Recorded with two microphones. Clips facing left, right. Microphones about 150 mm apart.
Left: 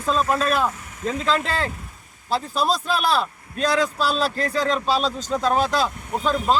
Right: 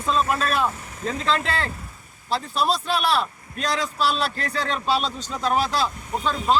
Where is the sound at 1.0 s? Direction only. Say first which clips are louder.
Left 2 dB; 35° right (ahead or behind).